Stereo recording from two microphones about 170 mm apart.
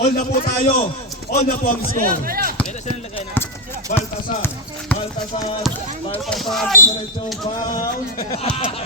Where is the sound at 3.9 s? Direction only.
55° left (ahead or behind).